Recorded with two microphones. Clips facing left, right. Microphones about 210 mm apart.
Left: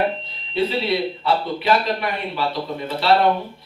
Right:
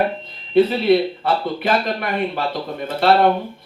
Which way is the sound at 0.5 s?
50° right (ahead or behind).